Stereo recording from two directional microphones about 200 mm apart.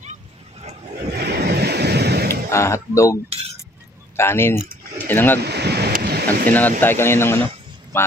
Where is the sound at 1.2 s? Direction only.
55° right (ahead or behind).